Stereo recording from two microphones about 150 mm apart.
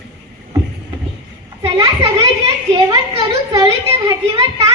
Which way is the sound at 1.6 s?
35° right (ahead or behind).